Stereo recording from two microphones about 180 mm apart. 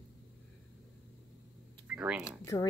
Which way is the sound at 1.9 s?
10° right (ahead or behind).